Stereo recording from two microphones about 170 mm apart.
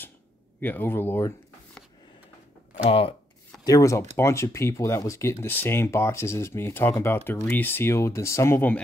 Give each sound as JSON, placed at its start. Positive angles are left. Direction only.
{"t": 0.6, "sound": "speech", "side_deg": 10}
{"t": 2.8, "sound": "speech", "side_deg": 35}
{"t": 3.6, "sound": "speech", "side_deg": 20}